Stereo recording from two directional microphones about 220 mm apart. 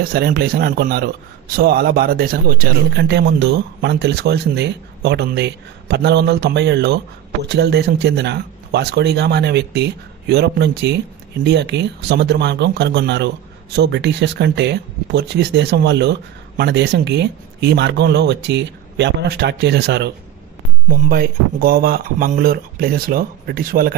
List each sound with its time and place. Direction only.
0.1 s speech: 45° right (ahead or behind)